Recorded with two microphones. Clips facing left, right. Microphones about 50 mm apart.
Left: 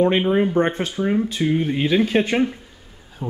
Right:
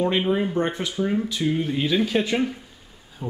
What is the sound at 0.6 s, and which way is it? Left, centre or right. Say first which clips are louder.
Speech: left 4 dB; left.